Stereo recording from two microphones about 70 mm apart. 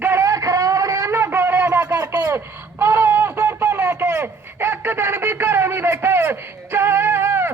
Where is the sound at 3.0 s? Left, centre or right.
Right.